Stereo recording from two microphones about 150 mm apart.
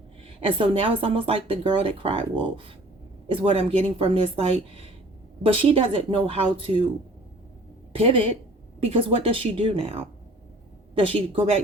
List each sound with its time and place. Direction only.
0.3 s speech: 40° right (ahead or behind)
7.9 s speech: 40° right (ahead or behind)